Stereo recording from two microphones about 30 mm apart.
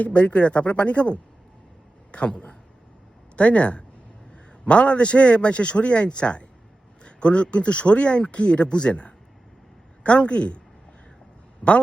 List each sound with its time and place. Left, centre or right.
0.1 s a man's voice: left
3.3 s a man's voice: left
10.2 s a man's voice: left
11.6 s speech: left